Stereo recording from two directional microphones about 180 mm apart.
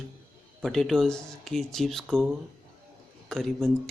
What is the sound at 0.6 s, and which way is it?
Speech, centre (ahead or behind).